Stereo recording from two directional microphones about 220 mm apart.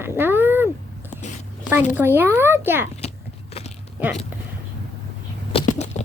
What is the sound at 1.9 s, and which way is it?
Speech, 10° right (ahead or behind).